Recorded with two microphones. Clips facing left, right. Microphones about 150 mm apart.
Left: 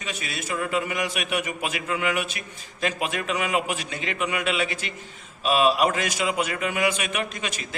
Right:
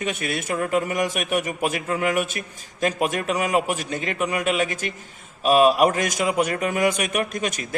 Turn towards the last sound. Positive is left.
turn(degrees=-50)  # may be behind; listen again after turning